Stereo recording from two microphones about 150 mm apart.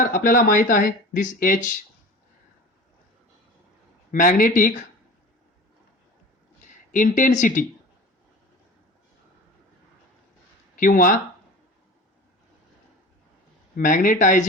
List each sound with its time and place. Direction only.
0.0 s speech: 65° left (ahead or behind)
4.1 s speech: 65° left (ahead or behind)
6.6 s speech: 60° left (ahead or behind)
10.8 s speech: 65° left (ahead or behind)
13.7 s speech: 65° left (ahead or behind)